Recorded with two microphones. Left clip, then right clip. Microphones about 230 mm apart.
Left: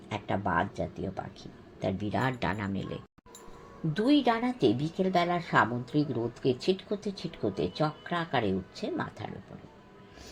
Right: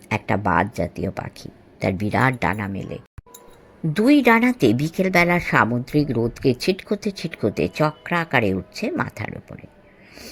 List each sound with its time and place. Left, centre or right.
0.1 s speech: right; by 3.0 s centre
3.9 s speech: right